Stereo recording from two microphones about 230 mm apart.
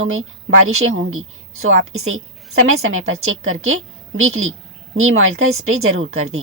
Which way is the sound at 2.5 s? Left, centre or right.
Right.